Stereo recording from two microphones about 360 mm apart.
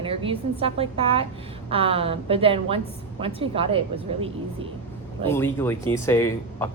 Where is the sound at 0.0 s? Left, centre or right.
Centre.